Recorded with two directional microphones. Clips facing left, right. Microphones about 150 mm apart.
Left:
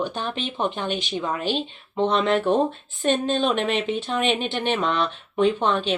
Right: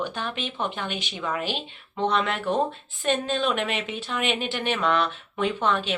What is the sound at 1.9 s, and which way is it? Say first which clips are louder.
Speech: left 5 dB; 30° left (ahead or behind).